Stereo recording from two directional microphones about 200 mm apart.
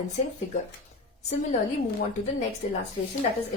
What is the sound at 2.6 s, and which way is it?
Speech, 40° left (ahead or behind).